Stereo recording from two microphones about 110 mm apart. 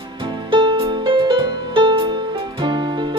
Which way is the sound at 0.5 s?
50° right (ahead or behind).